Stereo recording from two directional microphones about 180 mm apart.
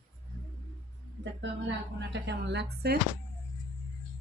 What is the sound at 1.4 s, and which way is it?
Speech, 80° right.